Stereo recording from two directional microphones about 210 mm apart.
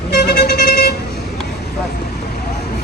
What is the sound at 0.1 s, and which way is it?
Vehicle, 50° left (ahead or behind).